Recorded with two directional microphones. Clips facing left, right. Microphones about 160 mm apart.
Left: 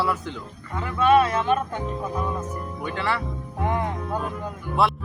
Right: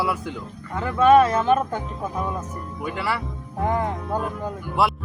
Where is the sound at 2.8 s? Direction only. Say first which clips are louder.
Right 1 dB; 5° right (ahead or behind).